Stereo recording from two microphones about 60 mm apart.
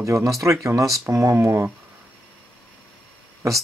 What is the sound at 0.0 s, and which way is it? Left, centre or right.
Speech, right.